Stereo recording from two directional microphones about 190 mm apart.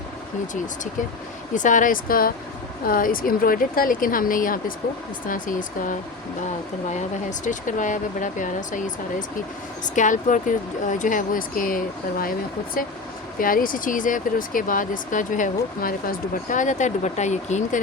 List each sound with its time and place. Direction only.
1.5 s speech: 40° left (ahead or behind)
13.4 s speech: 45° left (ahead or behind)